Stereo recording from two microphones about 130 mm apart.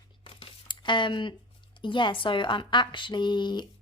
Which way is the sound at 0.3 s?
40° left (ahead or behind).